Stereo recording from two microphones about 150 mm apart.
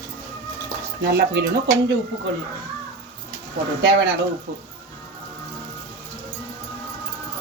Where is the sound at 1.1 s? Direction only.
90° right.